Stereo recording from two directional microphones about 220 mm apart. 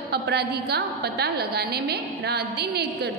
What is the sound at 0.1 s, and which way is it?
A woman's voice, 45° right (ahead or behind).